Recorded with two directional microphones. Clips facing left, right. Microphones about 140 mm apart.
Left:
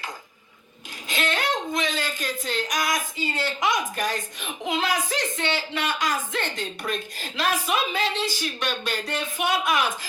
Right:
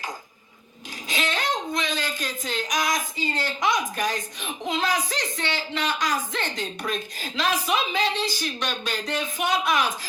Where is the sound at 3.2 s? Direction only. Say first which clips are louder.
Left 1 dB; 45° right (ahead or behind).